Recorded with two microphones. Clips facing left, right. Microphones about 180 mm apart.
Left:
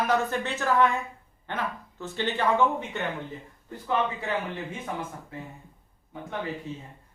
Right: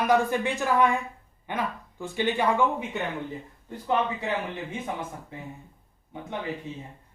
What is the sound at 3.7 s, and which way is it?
Speech, 20° right (ahead or behind).